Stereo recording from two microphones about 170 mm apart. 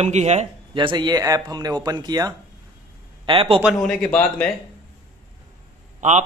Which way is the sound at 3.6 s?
5° left (ahead or behind).